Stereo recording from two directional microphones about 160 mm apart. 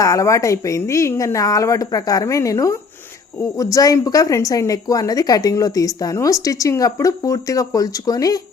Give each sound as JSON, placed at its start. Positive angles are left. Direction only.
{"t": 0.0, "sound": "a woman's voice", "side_deg": 20}